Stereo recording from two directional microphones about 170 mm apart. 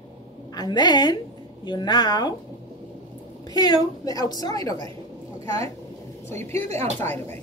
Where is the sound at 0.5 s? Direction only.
25° left (ahead or behind).